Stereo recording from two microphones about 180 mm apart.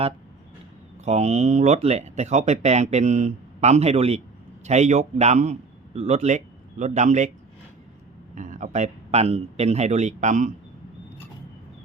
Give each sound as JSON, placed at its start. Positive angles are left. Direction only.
{"t": 1.0, "sound": "a man's voice", "side_deg": -40}
{"t": 8.4, "sound": "speech", "side_deg": -45}